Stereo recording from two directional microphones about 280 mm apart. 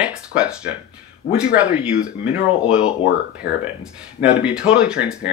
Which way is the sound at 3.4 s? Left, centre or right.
Left.